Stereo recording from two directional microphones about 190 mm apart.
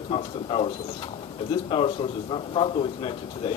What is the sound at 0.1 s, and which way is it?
Speech, 30° left (ahead or behind).